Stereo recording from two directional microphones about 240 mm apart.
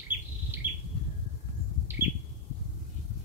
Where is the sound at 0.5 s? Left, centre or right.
Centre.